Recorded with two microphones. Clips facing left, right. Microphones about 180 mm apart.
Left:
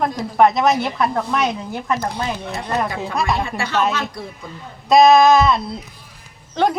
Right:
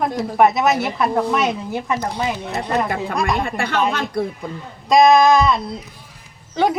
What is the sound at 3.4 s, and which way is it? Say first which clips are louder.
Speech: right 2 dB; 60° right (ahead or behind).